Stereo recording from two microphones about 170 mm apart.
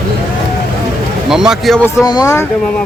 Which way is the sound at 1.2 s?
5° right (ahead or behind).